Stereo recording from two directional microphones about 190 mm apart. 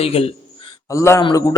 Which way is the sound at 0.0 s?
30° left (ahead or behind).